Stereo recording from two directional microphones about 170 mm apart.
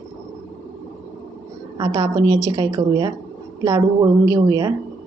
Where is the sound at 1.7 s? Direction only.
25° right (ahead or behind).